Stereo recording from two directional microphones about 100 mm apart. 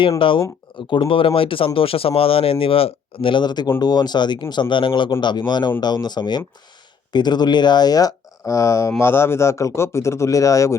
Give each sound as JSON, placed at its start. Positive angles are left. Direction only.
{"t": 0.2, "sound": "speech", "side_deg": 60}